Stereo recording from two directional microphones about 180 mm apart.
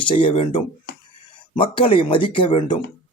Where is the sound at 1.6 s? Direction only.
30° left (ahead or behind).